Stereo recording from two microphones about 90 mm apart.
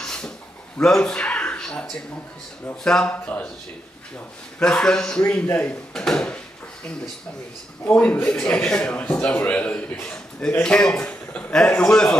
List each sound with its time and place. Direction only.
0.0 s a sound: 5° left (ahead or behind)
0.7 s a man's voice: 5° left (ahead or behind)
4.6 s a man's voice: 10° left (ahead or behind)
5.9 s a sound: 5° left (ahead or behind)
7.8 s a man's voice: 20° left (ahead or behind)
11.8 s a man's voice: 5° left (ahead or behind)